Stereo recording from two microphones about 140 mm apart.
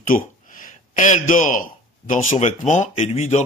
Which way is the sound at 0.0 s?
70° left (ahead or behind).